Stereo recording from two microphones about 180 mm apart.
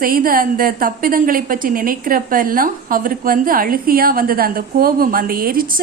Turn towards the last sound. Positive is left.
turn(degrees=-50)  # may be behind; listen again after turning